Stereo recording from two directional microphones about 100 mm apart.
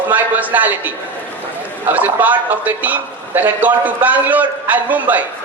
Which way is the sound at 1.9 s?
15° right (ahead or behind).